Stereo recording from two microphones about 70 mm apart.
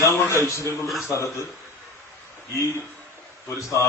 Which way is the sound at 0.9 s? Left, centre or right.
Centre.